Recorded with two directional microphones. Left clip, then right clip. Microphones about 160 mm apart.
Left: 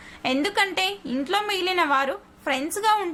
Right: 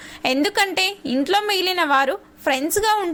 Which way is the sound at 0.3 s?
30° right (ahead or behind).